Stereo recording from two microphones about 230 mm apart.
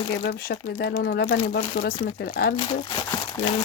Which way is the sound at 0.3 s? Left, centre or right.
Left.